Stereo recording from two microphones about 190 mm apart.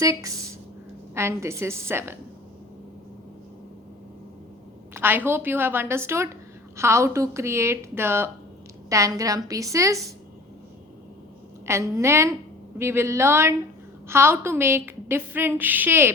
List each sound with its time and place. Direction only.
0.0 s a woman's voice: 15° right (ahead or behind)
4.9 s a woman's voice: 10° right (ahead or behind)
11.6 s a woman's voice: 15° right (ahead or behind)